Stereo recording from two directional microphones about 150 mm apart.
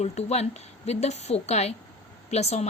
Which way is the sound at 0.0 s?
45° left (ahead or behind).